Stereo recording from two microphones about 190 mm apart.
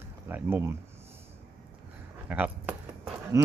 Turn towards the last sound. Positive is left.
turn(degrees=-5)  # may be behind; listen again after turning